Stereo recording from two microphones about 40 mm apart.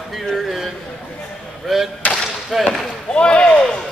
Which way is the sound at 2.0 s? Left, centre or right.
Left.